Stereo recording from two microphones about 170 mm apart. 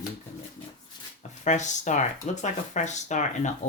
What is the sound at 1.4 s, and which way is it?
Speech, 45° left (ahead or behind).